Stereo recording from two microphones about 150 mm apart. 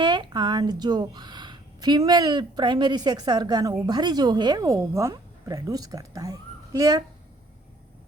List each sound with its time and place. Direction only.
0.0 s a woman's voice: 30° right (ahead or behind)